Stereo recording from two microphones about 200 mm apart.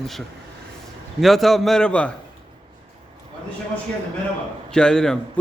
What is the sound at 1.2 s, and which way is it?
Speech, centre (ahead or behind).